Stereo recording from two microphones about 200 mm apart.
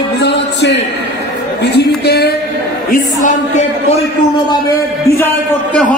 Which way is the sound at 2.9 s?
35° left (ahead or behind).